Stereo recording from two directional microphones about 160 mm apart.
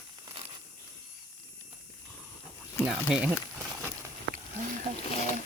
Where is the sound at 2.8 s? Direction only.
5° right (ahead or behind).